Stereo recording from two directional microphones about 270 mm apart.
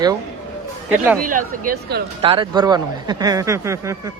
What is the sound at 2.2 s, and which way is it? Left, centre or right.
A man's voice, centre.